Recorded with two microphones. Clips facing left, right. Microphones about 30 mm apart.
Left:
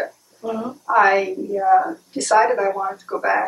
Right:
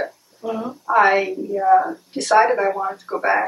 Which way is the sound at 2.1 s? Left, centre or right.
Right.